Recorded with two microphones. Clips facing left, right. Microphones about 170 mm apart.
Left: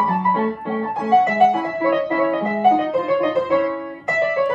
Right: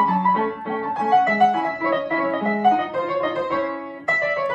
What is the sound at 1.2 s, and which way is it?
Music, 20° left (ahead or behind).